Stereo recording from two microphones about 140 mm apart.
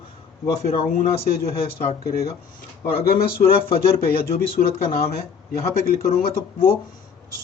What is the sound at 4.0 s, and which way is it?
Speech, 90° left.